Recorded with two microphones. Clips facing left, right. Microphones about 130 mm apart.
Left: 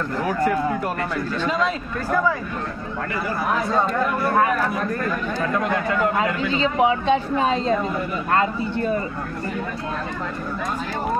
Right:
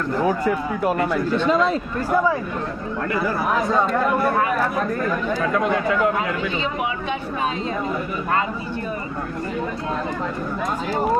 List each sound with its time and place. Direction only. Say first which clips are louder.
0.8 s a man's voice: right 5 dB; 20° right (ahead or behind)
6.8 s speech: left 7 dB; 30° left (ahead or behind)